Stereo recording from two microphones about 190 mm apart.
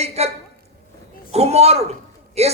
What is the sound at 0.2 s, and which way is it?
A man's voice, 35° right (ahead or behind).